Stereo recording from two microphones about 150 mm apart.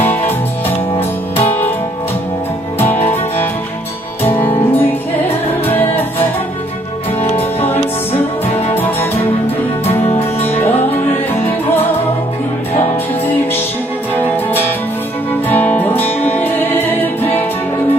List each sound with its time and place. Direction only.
0.0 s music: 10° left (ahead or behind)
4.2 s music: 10° left (ahead or behind)
7.2 s music: 40° left (ahead or behind)
10.1 s music: 15° left (ahead or behind)
14.1 s music: 10° left (ahead or behind)